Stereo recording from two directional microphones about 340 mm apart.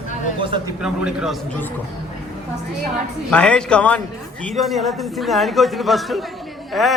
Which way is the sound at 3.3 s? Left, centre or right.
Centre.